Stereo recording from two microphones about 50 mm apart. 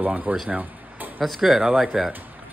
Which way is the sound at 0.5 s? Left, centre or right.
Right.